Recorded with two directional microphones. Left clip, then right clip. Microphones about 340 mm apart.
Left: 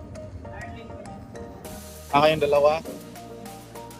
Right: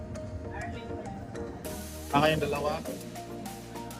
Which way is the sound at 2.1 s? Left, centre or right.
Centre.